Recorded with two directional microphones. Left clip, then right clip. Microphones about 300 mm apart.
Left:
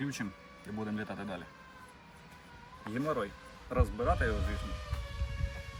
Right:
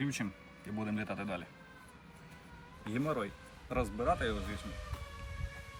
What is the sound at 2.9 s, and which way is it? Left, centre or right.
Speech, centre.